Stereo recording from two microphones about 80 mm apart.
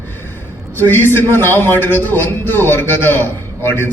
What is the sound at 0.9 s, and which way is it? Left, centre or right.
Speech, left.